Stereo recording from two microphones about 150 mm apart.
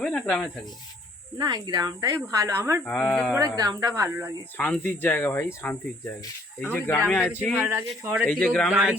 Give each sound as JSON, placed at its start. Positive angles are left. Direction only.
{"t": 0.0, "sound": "speech", "side_deg": 5}
{"t": 1.4, "sound": "speech", "side_deg": -30}
{"t": 2.8, "sound": "speech", "side_deg": 5}
{"t": 3.3, "sound": "speech", "side_deg": -25}
{"t": 4.5, "sound": "speech", "side_deg": 10}
{"t": 6.7, "sound": "speech", "side_deg": 10}
{"t": 7.6, "sound": "speech", "side_deg": -15}
{"t": 8.3, "sound": "speech", "side_deg": 5}